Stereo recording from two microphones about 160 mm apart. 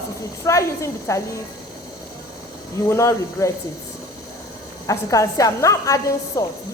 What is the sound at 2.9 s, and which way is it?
Speech, 20° left (ahead or behind).